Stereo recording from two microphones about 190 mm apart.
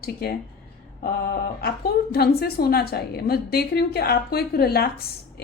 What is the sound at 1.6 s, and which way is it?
A woman's voice, 55° left (ahead or behind).